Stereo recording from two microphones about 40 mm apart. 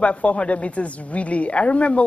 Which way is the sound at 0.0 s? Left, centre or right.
Left.